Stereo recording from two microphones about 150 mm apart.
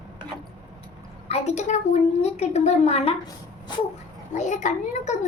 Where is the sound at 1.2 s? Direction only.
45° left (ahead or behind).